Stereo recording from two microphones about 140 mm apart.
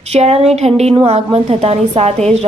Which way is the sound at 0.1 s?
50° right (ahead or behind).